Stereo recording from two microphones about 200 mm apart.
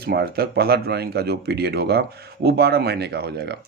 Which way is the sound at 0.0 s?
50° right (ahead or behind).